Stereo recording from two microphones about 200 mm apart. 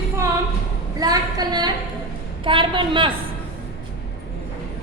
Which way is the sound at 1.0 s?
20° right (ahead or behind).